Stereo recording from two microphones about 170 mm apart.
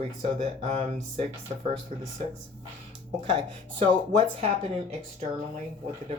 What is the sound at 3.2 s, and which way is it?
Speech, 35° right (ahead or behind).